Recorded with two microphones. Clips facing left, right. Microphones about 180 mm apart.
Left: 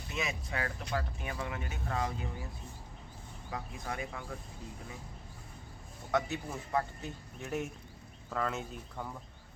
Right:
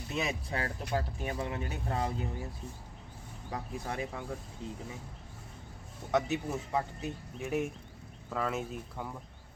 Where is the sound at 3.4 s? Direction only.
30° right (ahead or behind).